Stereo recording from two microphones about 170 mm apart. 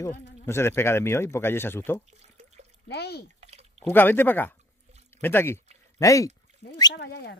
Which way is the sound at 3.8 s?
10° left (ahead or behind).